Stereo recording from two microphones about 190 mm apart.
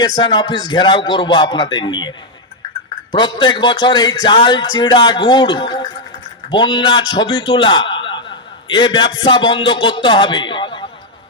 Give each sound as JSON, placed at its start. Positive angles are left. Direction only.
{"t": 0.0, "sound": "speech", "side_deg": 25}
{"t": 3.2, "sound": "a man's voice", "side_deg": 25}